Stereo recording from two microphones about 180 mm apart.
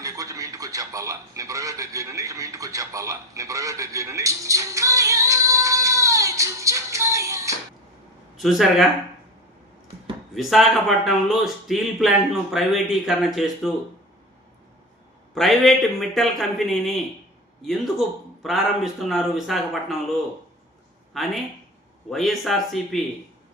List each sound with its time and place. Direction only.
0.0 s a sound: 20° right (ahead or behind)
8.4 s speech: centre (ahead or behind)
10.3 s speech: centre (ahead or behind)
15.4 s speech: centre (ahead or behind)
21.1 s speech: centre (ahead or behind)